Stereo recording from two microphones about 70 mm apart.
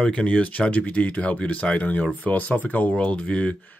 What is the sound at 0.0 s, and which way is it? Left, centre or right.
Speech, centre.